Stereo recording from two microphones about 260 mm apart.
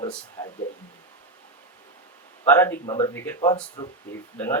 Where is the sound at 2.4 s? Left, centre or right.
Centre.